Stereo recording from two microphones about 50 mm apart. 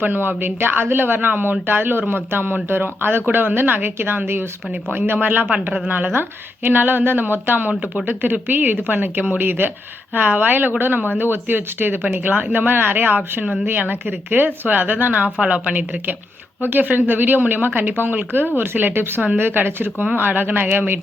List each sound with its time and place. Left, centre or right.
0.0 s speech: right
7.7 s speech: right
8.0 s speech: right